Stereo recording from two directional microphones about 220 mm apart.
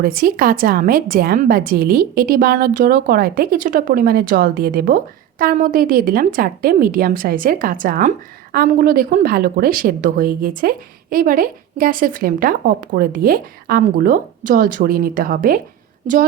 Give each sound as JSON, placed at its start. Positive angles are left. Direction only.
{"t": 0.0, "sound": "speech", "side_deg": -40}